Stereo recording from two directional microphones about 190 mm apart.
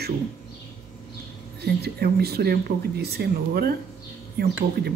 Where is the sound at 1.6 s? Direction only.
55° right (ahead or behind).